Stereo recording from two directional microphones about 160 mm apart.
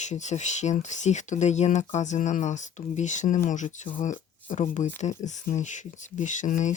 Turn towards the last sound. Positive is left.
turn(degrees=50)  # may be behind; listen again after turning